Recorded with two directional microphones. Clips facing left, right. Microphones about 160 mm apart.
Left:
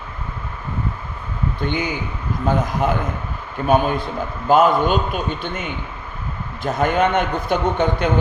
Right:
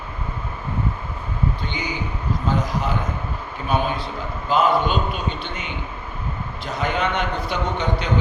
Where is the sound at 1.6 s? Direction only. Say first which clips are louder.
Left 6 dB; 55° left (ahead or behind).